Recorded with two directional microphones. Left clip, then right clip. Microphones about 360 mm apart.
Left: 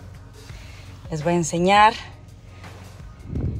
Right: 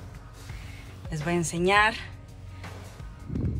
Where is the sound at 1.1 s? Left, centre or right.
Centre.